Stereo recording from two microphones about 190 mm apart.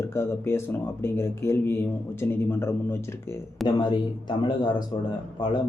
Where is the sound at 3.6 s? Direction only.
25° left (ahead or behind).